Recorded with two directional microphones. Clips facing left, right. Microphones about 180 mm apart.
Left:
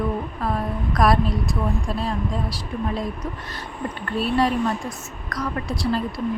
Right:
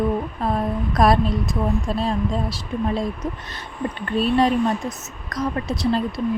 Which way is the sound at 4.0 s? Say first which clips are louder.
Right 3 dB; 20° right (ahead or behind).